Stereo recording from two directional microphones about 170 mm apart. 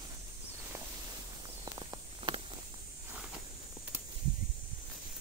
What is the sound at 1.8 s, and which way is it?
Walk, 30° right (ahead or behind).